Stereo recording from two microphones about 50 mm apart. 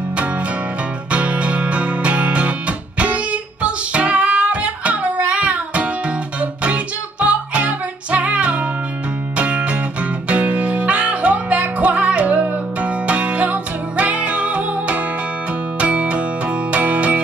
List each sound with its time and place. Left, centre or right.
1.1 s music: right
3.6 s music: right